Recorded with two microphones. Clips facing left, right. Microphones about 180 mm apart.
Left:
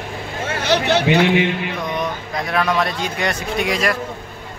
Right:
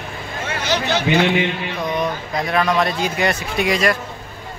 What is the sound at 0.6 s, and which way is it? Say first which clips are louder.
Speech: left 4 dB; 60° left (ahead or behind).